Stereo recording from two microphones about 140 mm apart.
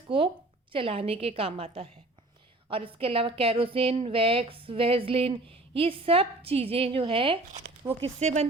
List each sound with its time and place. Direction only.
0.1 s a woman's voice: 40° right (ahead or behind)
8.0 s a woman's voice: 55° right (ahead or behind)